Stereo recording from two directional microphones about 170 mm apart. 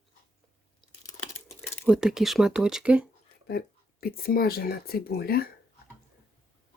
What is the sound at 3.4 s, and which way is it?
Speech, 65° left (ahead or behind).